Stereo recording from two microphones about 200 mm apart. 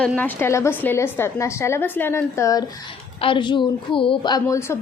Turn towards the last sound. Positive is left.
turn(degrees=15)  # may be behind; listen again after turning